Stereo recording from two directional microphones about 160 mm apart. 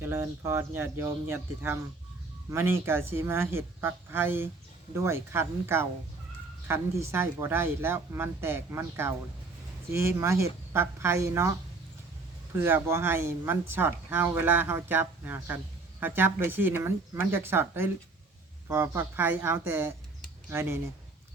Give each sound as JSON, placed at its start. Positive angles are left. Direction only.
{"t": 0.0, "sound": "speech", "side_deg": -15}
{"t": 12.5, "sound": "speech", "side_deg": -15}